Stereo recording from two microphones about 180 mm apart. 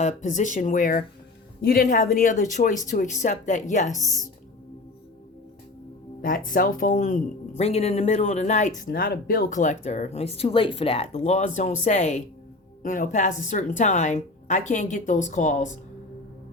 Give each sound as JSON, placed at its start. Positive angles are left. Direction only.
{"t": 0.0, "sound": "a woman's voice", "side_deg": 40}
{"t": 6.2, "sound": "a woman's voice", "side_deg": 50}